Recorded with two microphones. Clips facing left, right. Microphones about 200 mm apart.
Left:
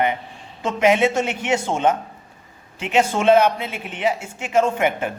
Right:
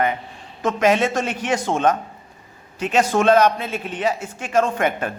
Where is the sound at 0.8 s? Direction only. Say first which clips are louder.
Left 2 dB; 10° left (ahead or behind).